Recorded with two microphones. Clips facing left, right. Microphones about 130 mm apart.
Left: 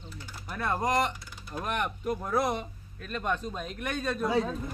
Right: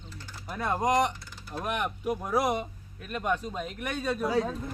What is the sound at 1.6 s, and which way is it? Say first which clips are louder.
Speech: right 1 dB; 5° right (ahead or behind).